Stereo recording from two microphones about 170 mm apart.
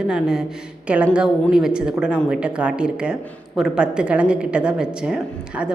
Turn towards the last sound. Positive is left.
turn(degrees=-5)  # may be behind; listen again after turning